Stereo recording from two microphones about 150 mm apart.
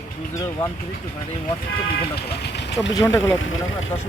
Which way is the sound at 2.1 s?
90° left.